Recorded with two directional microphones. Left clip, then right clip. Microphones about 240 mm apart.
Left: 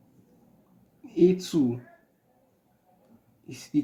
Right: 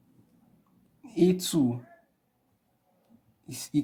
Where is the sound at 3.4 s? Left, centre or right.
Right.